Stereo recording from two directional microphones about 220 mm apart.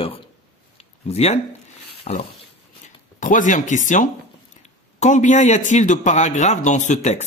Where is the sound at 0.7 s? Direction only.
30° left (ahead or behind).